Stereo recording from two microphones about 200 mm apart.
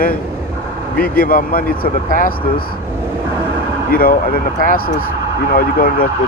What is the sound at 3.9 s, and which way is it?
Speech, 45° left (ahead or behind).